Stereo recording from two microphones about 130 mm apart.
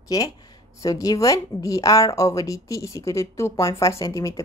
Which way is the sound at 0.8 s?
25° left (ahead or behind).